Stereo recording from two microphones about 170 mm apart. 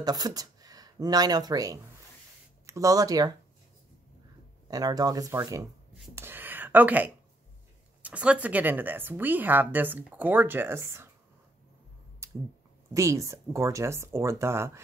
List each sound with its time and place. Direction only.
0.0 s speech: 25° right (ahead or behind)
4.6 s speech: 20° right (ahead or behind)
6.1 s a sound: 10° right (ahead or behind)
8.0 s speech: 10° right (ahead or behind)
12.2 s a sound: 15° right (ahead or behind)
12.9 s speech: 20° right (ahead or behind)